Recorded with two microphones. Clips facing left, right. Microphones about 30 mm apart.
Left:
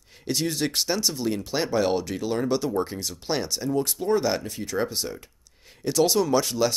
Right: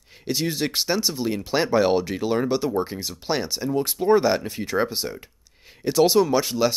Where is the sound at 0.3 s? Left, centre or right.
Centre.